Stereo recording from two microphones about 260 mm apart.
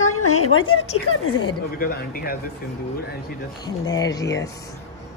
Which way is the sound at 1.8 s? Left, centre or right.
Left.